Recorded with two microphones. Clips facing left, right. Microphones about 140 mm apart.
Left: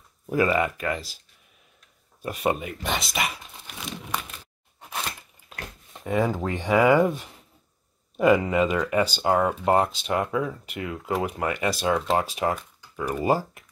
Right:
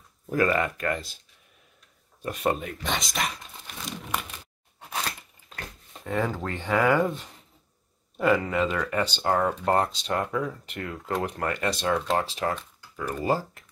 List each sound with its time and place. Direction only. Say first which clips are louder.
0.3 s speech: left 2 dB; 10° left (ahead or behind)
2.2 s speech: left 1 dB; 5° left (ahead or behind)
4.7 s a sound: right 1 dB; 5° right (ahead or behind)
5.5 s speech: left 1 dB; 10° left (ahead or behind)